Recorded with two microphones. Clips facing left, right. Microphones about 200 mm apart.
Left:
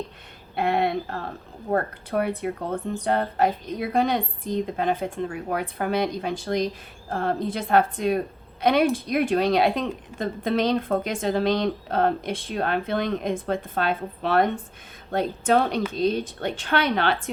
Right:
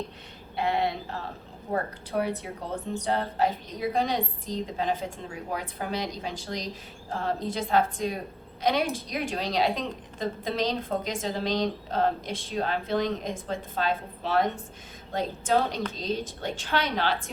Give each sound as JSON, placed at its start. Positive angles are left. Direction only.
{"t": 0.5, "sound": "a woman's voice", "side_deg": 55}